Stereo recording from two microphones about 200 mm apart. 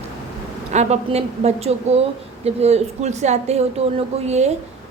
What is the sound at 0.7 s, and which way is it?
A woman's voice, 35° right (ahead or behind).